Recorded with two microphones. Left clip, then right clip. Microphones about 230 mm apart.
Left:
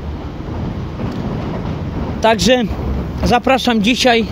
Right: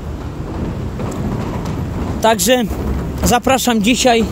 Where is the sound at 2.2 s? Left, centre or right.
Centre.